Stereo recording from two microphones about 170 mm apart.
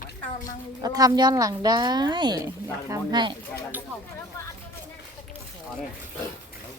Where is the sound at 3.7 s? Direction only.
10° right (ahead or behind).